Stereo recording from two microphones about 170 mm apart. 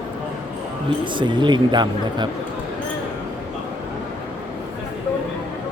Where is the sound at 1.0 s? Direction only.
30° right (ahead or behind).